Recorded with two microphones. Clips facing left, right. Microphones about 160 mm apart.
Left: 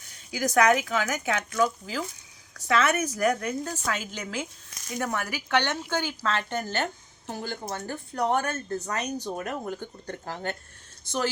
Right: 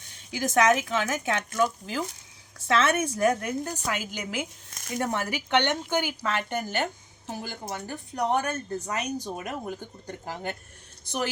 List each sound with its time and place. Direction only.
0.3 s a woman's voice: 25° right (ahead or behind)
2.6 s a woman's voice: 25° right (ahead or behind)
4.9 s speech: 25° right (ahead or behind)